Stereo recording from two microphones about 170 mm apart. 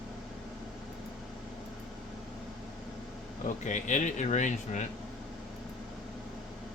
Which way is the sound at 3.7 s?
45° left (ahead or behind).